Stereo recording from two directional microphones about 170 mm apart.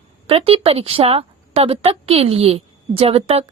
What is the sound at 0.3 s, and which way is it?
A woman's voice, 35° right (ahead or behind).